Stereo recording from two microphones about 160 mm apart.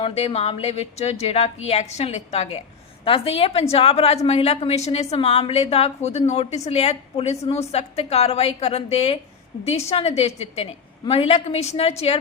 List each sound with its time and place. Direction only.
0.0 s a woman's voice: 40° left (ahead or behind)